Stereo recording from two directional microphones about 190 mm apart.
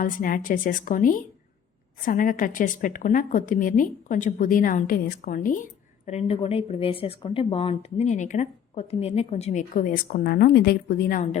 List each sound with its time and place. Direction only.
0.0 s a woman's voice: 45° left (ahead or behind)
6.1 s speech: 35° left (ahead or behind)